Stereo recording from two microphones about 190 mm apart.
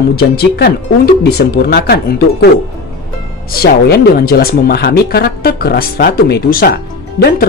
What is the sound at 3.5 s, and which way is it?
Speech, 50° left (ahead or behind).